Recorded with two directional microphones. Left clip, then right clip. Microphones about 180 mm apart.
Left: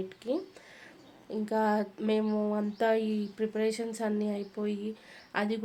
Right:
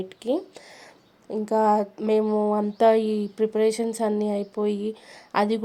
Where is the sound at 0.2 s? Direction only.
40° right (ahead or behind).